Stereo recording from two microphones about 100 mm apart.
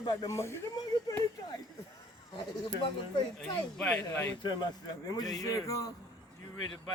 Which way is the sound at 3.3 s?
5° left (ahead or behind).